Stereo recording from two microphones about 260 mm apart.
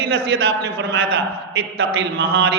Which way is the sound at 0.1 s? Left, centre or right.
Right.